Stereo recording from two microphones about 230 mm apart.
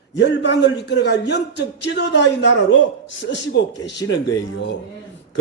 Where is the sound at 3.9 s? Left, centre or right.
Centre.